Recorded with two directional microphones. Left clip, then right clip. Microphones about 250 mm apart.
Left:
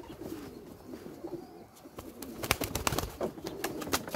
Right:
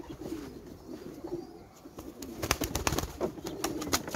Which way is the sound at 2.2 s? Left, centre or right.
Centre.